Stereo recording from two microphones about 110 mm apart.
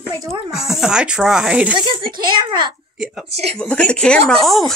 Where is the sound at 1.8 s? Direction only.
45° right (ahead or behind).